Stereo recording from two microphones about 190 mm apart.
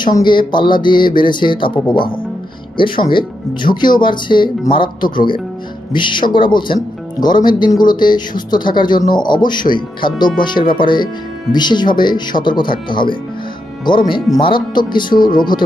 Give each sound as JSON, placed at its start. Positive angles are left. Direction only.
{"t": 0.2, "sound": "speech", "side_deg": 25}